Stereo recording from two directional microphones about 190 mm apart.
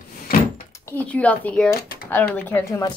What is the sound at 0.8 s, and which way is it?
Speech, 10° left (ahead or behind).